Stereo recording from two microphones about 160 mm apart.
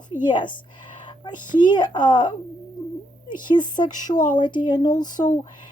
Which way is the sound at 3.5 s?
25° left (ahead or behind).